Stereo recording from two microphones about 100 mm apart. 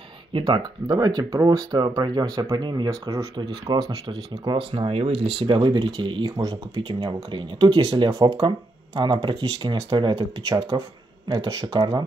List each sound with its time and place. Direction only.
0.3 s speech: 60° right (ahead or behind)
0.6 s speech: 45° right (ahead or behind)
6.3 s speech: 40° right (ahead or behind)
7.2 s speech: 55° right (ahead or behind)